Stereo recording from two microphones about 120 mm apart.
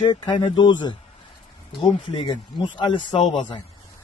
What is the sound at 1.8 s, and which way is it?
Speech, 50° left (ahead or behind).